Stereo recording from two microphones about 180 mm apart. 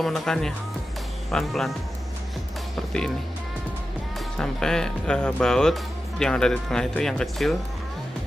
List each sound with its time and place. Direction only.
0.0 s speech: centre (ahead or behind)
4.4 s speech: 5° left (ahead or behind)